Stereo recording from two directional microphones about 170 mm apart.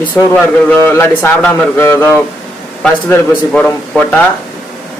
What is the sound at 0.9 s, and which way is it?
A man's voice, 15° left (ahead or behind).